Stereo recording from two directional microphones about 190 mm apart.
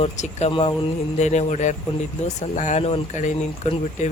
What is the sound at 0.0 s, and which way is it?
Speech, 35° left (ahead or behind).